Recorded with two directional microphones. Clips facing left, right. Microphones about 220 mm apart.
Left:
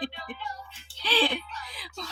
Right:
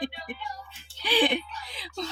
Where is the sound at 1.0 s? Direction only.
15° right (ahead or behind).